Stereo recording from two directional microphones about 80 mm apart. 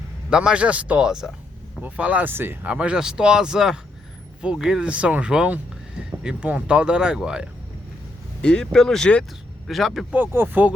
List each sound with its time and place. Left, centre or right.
0.3 s speech: centre; by 2.6 s right
2.6 s speech: centre
8.4 s speech: centre
9.6 s speech: centre
10.1 s speech: right